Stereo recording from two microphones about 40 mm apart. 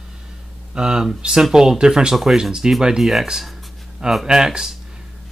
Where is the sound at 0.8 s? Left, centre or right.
Centre.